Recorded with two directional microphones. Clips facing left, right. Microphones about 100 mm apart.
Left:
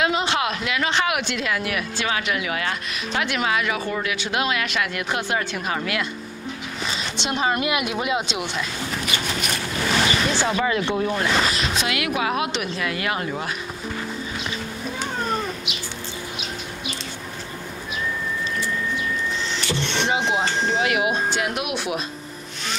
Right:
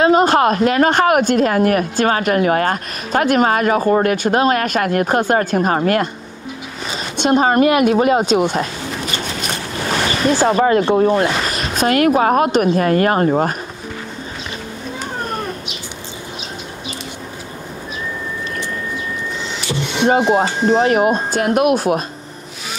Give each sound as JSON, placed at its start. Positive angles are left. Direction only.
{"t": 0.0, "sound": "speech", "side_deg": -45}
{"t": 10.3, "sound": "speech", "side_deg": -45}
{"t": 19.7, "sound": "a sound", "side_deg": -10}
{"t": 20.6, "sound": "speech", "side_deg": -45}